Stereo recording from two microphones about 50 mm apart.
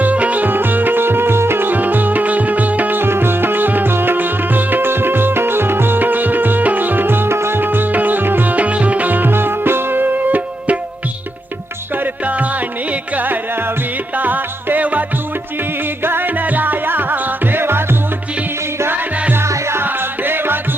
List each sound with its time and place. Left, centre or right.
0.0 s music: right
12.2 s music: right
16.0 s music: right
19.5 s music: right
19.8 s music: right